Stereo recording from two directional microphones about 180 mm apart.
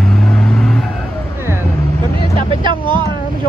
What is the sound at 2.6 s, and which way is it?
Speech, 25° right (ahead or behind).